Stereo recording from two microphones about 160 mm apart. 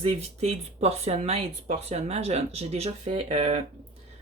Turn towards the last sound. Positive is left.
turn(degrees=-40)  # may be behind; listen again after turning